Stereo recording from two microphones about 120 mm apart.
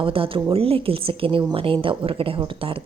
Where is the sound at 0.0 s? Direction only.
50° right (ahead or behind).